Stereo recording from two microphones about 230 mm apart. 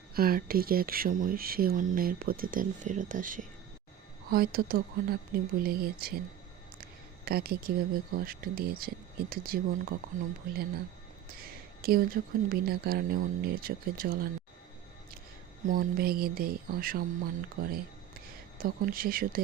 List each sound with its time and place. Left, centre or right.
0.1 s speech: right
7.3 s speech: right
15.6 s speech: right